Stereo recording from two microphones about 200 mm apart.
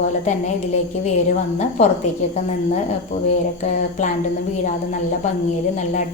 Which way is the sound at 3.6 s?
35° left (ahead or behind).